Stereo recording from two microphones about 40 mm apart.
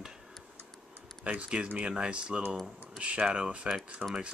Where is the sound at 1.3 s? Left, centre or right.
Right.